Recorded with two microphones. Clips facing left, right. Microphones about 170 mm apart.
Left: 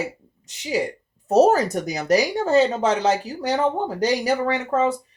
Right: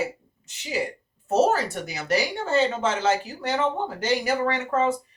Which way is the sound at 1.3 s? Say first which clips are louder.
Left 5 dB; 40° left (ahead or behind).